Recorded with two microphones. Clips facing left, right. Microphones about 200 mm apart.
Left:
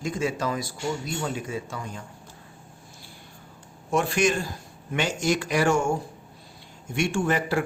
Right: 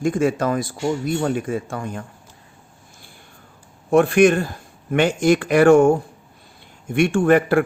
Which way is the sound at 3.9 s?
60° right (ahead or behind).